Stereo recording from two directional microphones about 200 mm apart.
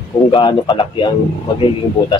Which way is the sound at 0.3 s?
25° left (ahead or behind).